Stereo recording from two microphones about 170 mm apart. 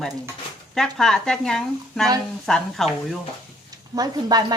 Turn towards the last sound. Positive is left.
turn(degrees=-25)  # may be behind; listen again after turning